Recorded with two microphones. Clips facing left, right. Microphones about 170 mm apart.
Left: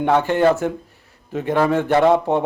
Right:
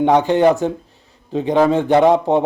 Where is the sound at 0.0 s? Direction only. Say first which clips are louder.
Right 3 dB; 15° right (ahead or behind).